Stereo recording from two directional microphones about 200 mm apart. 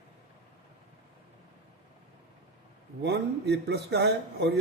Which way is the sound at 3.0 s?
55° right (ahead or behind).